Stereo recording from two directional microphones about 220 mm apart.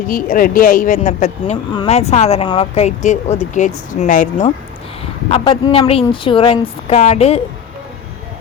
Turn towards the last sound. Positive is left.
turn(degrees=30)  # may be behind; listen again after turning